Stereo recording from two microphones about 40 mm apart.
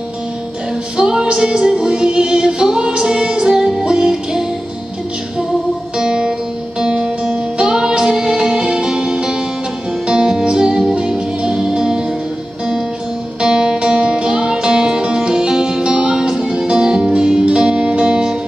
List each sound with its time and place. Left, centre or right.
0.9 s music: centre
5.9 s music: centre
13.4 s music: centre